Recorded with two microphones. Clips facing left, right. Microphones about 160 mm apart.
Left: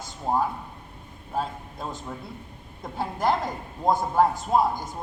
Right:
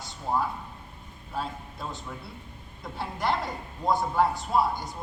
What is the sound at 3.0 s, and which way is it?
A man's voice, 45° left (ahead or behind).